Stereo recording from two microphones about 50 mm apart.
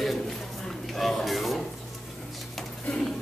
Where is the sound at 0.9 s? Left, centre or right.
Centre.